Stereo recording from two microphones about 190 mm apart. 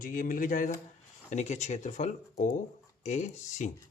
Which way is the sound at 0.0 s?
45° left (ahead or behind).